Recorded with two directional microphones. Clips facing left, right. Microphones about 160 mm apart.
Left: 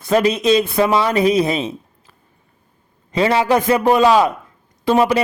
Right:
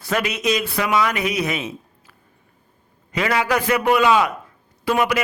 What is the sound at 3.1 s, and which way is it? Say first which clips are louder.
A man's voice: left 5 dB; 30° left (ahead or behind).